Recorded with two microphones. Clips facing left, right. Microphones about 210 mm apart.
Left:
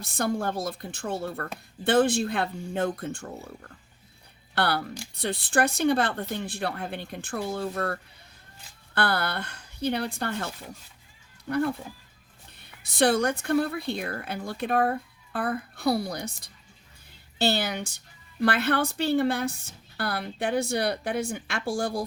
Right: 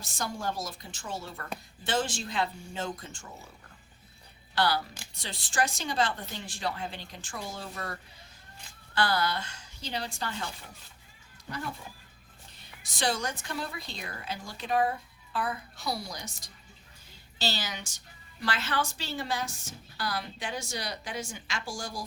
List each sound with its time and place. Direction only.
0.0 s a woman's voice: 60° left (ahead or behind)
9.0 s a woman's voice: 60° left (ahead or behind)